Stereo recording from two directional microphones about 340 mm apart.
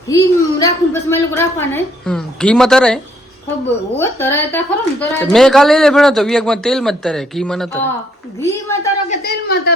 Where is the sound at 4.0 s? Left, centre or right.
Centre.